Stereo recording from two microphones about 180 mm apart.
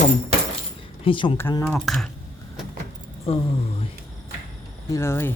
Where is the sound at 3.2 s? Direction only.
30° left (ahead or behind).